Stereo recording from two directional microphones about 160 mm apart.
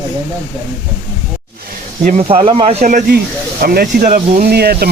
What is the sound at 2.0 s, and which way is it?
Speech, 40° right (ahead or behind).